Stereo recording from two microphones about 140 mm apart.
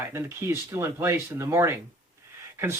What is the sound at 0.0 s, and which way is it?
Speech, 15° right (ahead or behind).